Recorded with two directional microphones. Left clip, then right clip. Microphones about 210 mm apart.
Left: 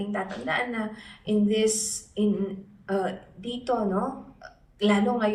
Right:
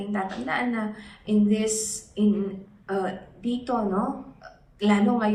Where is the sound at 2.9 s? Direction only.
50° left (ahead or behind).